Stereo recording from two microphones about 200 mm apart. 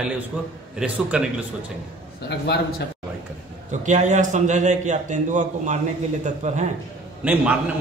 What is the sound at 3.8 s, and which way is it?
A man's voice, 35° right (ahead or behind).